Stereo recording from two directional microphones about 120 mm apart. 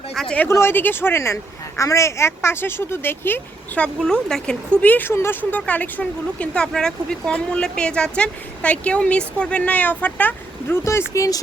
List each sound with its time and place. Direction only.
0.1 s speech: 5° left (ahead or behind)
0.4 s a woman's voice: 20° left (ahead or behind)
4.0 s speech: 5° left (ahead or behind)
11.1 s a woman's voice: 25° left (ahead or behind)